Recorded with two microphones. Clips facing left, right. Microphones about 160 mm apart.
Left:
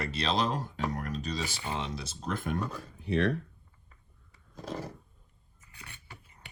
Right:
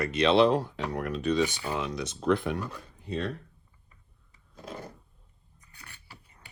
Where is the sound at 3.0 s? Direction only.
70° left (ahead or behind).